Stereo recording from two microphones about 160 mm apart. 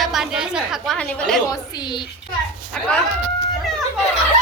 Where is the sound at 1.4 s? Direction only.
25° left (ahead or behind).